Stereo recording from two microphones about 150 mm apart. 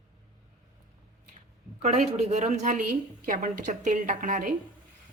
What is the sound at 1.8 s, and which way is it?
A woman's voice, 45° right (ahead or behind).